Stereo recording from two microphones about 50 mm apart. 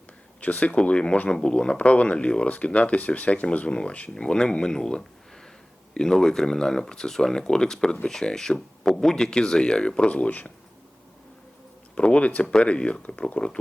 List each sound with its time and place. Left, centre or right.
0.4 s speech: left
11.9 s speech: left